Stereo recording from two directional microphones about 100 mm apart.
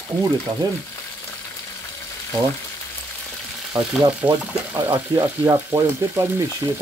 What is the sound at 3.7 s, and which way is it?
Frying, 10° right (ahead or behind).